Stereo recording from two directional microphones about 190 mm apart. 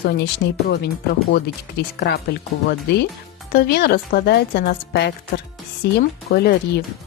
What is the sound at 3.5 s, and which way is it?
Speech, 55° left (ahead or behind).